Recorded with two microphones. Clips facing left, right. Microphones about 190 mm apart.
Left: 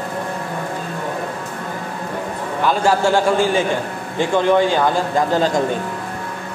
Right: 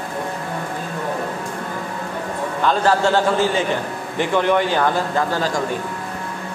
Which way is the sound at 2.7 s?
10° left (ahead or behind).